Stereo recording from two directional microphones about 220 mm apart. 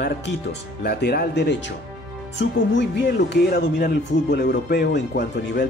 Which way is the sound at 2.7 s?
50° left (ahead or behind).